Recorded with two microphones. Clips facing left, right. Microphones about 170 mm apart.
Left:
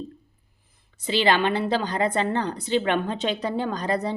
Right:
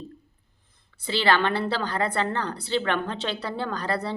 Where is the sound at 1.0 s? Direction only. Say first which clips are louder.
Left 2 dB; 15° left (ahead or behind).